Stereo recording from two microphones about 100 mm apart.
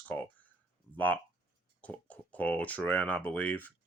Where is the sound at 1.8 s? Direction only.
15° left (ahead or behind).